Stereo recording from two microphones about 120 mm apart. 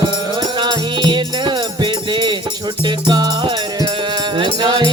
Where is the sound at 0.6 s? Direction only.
40° right (ahead or behind).